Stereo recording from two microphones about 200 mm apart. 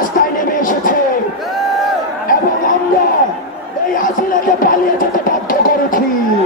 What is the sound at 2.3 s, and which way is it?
Chatter, 45° left (ahead or behind).